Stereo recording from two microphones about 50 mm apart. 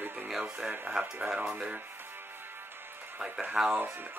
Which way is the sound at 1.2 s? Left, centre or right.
Centre.